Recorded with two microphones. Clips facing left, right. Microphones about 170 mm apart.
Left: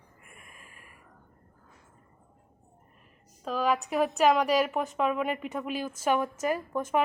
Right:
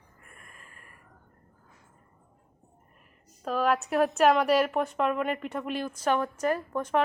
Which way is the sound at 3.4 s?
Centre (ahead or behind).